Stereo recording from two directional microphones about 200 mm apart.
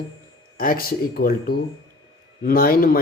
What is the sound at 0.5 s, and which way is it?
A man's voice, 45° left (ahead or behind).